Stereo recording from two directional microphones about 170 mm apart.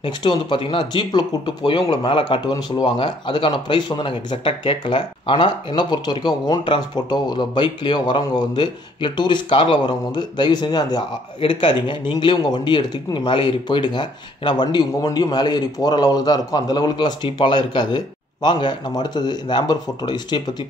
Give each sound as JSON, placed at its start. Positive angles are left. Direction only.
{"t": 0.0, "sound": "speech", "side_deg": 25}